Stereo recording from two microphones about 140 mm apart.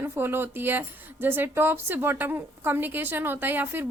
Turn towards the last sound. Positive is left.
turn(degrees=-15)  # may be behind; listen again after turning